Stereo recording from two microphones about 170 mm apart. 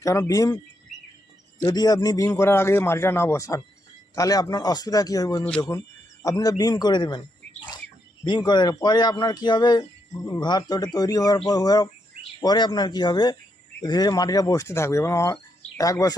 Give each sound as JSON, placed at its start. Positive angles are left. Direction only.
{"t": 0.0, "sound": "speech", "side_deg": 20}
{"t": 1.6, "sound": "a man's voice", "side_deg": 25}
{"t": 8.2, "sound": "speech", "side_deg": 25}